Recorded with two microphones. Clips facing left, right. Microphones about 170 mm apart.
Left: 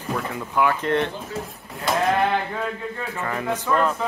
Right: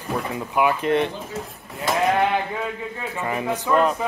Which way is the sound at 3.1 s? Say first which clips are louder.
Right 2 dB; 15° right (ahead or behind).